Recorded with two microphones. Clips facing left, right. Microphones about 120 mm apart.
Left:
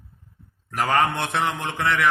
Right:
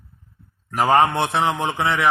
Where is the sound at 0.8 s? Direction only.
35° right (ahead or behind).